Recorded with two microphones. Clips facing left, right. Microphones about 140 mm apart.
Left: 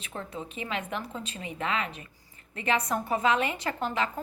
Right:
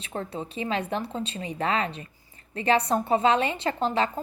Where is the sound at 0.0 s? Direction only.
35° right (ahead or behind).